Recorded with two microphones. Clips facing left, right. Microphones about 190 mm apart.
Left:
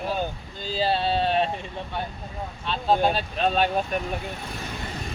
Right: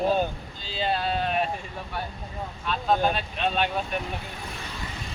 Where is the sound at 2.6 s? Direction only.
30° left (ahead or behind).